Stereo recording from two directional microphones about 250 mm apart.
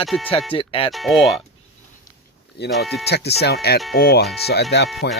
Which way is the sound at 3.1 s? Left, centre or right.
Left.